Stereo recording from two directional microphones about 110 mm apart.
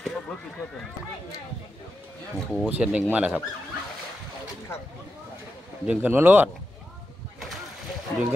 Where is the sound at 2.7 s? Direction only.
15° right (ahead or behind).